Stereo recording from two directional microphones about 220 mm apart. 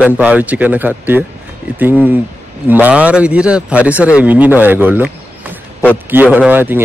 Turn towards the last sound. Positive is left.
turn(degrees=-10)  # may be behind; listen again after turning